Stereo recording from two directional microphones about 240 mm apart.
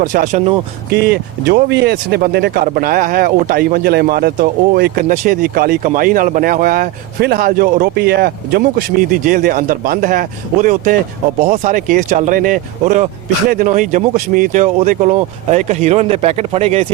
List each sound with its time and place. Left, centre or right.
0.0 s speech: right